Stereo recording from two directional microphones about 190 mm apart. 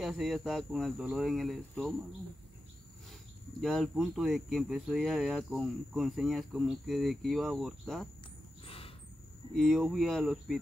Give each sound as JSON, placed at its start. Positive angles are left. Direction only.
{"t": 0.0, "sound": "speech", "side_deg": 0}
{"t": 3.6, "sound": "speech", "side_deg": 0}
{"t": 8.6, "sound": "a sound", "side_deg": 30}
{"t": 9.6, "sound": "speech", "side_deg": 0}